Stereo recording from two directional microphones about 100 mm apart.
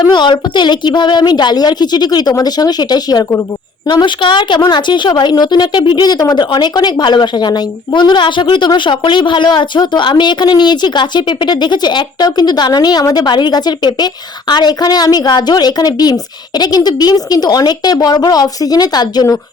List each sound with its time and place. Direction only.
0.0 s a woman's voice: 50° left (ahead or behind)